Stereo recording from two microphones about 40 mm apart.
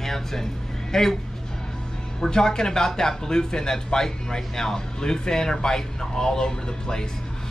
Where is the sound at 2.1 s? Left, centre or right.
Centre.